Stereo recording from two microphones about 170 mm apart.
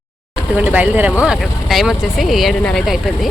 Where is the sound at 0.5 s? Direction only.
10° right (ahead or behind).